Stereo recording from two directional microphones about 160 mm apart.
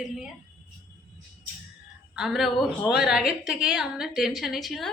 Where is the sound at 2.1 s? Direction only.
Centre (ahead or behind).